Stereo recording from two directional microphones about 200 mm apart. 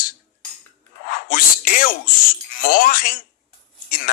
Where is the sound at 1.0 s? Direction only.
45° left (ahead or behind).